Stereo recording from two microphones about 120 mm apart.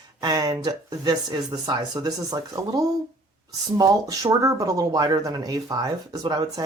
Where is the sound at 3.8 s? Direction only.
30° right (ahead or behind).